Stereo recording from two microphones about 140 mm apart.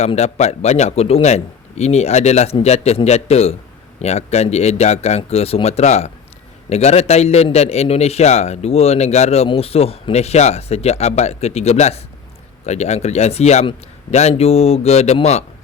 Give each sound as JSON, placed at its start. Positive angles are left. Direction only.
{"t": 0.0, "sound": "a man's voice", "side_deg": 50}